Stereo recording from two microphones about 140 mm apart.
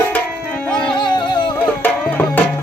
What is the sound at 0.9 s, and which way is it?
Music, 35° left (ahead or behind).